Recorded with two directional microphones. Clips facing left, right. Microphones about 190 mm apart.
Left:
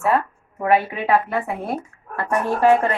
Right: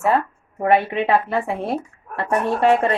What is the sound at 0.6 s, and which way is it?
A woman's voice, 25° right (ahead or behind).